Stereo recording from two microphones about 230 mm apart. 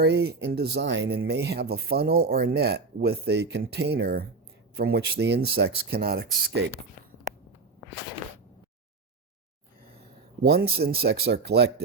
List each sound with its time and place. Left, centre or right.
0.0 s speech: right
10.4 s speech: right